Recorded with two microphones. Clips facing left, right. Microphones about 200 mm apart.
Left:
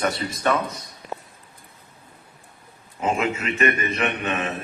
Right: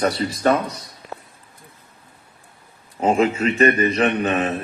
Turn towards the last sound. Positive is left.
turn(degrees=-35)  # may be behind; listen again after turning